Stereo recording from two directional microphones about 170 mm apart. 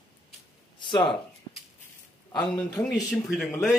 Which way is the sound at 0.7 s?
30° left (ahead or behind).